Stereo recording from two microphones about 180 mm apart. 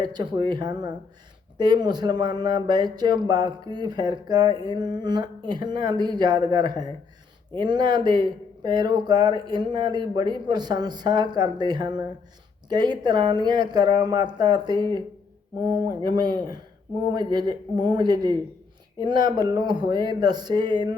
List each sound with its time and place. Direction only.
0.0 s speech: 25° right (ahead or behind)